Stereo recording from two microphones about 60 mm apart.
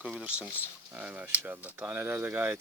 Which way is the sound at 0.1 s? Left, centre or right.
Right.